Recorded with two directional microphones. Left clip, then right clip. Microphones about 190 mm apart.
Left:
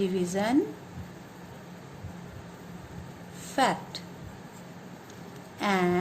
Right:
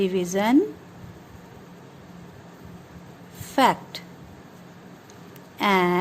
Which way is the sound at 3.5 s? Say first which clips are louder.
Right 6 dB; 45° right (ahead or behind).